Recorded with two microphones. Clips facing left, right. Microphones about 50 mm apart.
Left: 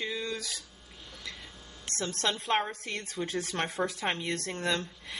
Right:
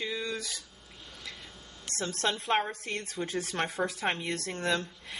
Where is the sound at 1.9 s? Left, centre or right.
Centre.